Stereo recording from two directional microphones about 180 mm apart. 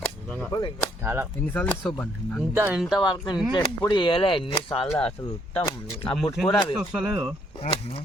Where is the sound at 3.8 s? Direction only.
25° left (ahead or behind).